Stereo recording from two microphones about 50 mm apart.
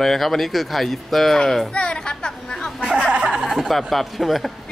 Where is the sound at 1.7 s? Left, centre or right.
Centre.